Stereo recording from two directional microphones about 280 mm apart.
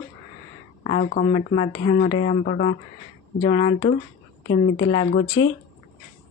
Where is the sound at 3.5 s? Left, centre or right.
Centre.